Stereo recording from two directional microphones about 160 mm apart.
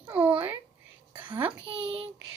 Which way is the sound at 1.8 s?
35° right (ahead or behind).